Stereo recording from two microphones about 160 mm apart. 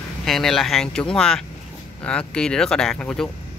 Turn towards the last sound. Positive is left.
turn(degrees=5)  # may be behind; listen again after turning